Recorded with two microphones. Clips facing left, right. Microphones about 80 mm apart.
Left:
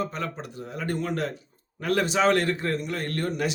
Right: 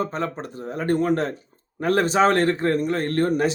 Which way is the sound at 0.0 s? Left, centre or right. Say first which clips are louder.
Right 4 dB; right.